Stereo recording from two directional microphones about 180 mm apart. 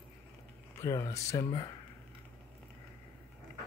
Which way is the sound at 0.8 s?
15° left (ahead or behind).